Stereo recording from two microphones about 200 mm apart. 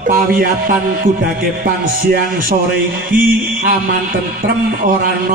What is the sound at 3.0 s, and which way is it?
A man's voice, 45° right (ahead or behind).